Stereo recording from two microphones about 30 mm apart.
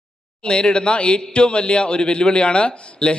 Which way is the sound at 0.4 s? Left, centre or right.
Left.